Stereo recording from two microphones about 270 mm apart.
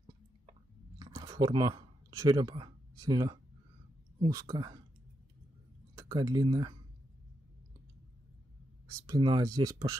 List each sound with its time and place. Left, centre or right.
0.5 s a sound: centre
4.2 s speech: centre
5.9 s speech: centre
8.8 s speech: centre